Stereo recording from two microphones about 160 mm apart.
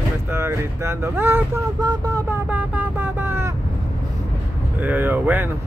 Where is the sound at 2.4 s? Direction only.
10° right (ahead or behind).